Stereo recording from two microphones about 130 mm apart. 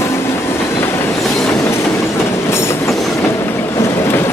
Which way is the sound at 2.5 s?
20° left (ahead or behind).